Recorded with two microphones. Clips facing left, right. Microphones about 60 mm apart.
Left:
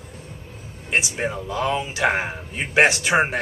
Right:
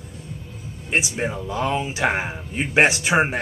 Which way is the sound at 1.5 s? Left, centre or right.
Centre.